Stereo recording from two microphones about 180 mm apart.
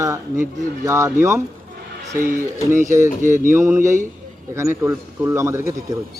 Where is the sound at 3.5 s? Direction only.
15° right (ahead or behind).